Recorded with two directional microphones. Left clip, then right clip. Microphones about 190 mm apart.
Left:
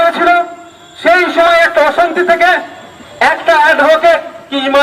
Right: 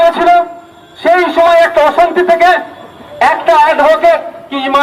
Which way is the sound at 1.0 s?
15° left (ahead or behind).